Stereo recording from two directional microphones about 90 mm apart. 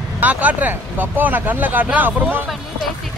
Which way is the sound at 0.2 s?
15° right (ahead or behind).